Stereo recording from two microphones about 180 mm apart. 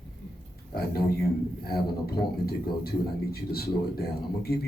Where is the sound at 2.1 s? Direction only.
60° left (ahead or behind).